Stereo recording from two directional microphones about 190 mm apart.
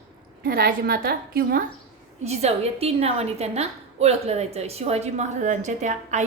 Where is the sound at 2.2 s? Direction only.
35° right (ahead or behind).